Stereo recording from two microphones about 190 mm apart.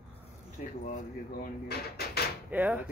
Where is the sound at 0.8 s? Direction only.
45° left (ahead or behind).